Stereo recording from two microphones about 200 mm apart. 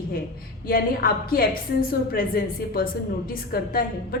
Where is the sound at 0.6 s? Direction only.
50° left (ahead or behind).